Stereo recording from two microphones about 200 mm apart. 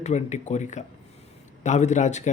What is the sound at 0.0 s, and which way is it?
Speech, 35° left (ahead or behind).